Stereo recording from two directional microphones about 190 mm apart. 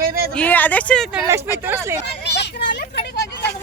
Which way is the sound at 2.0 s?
60° left (ahead or behind).